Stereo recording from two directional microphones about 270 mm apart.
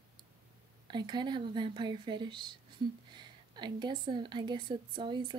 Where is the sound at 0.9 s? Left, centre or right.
Centre.